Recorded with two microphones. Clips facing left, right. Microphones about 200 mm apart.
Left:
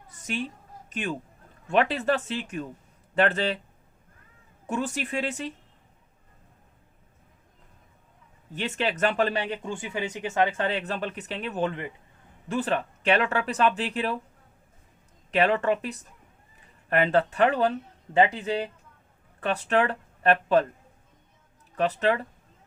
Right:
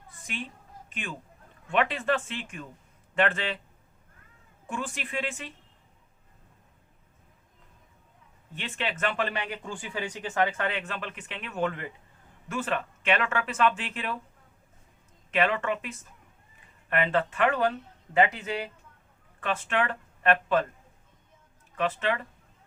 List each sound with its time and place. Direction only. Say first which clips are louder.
0.9 s a man's voice: left 8 dB; 45° left (ahead or behind)
4.6 s speech: left 6 dB; 40° left (ahead or behind)
8.5 s speech: left 5 dB; 40° left (ahead or behind)
15.3 s speech: left 4 dB; 40° left (ahead or behind)
21.8 s speech: left 4 dB; 40° left (ahead or behind)